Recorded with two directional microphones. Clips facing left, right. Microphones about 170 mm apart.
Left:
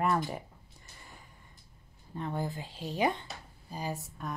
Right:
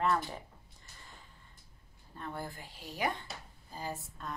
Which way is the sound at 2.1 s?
15° left (ahead or behind).